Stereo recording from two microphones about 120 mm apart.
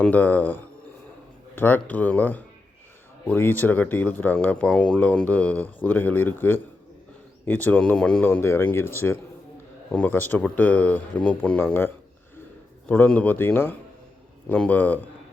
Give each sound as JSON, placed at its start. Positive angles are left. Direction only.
{"t": 0.0, "sound": "speech", "side_deg": 15}
{"t": 8.3, "sound": "speech", "side_deg": 20}
{"t": 12.9, "sound": "speech", "side_deg": 10}